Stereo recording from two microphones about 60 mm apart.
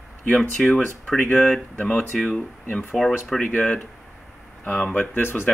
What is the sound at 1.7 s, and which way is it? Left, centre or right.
Speech, left.